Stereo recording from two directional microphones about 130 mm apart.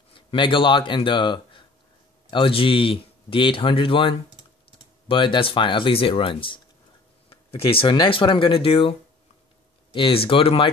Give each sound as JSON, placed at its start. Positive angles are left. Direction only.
{"t": 0.1, "sound": "a man's voice", "side_deg": 40}
{"t": 9.9, "sound": "a man's voice", "side_deg": 45}